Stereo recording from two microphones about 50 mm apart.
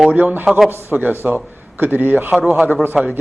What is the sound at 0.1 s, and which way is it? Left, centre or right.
Speech, right.